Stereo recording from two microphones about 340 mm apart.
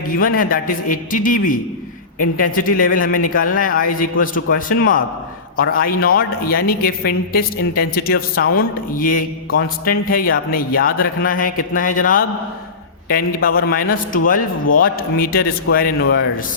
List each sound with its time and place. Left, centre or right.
0.2 s a woman's voice: left